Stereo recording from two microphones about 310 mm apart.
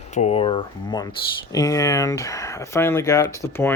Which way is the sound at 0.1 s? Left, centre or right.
Left.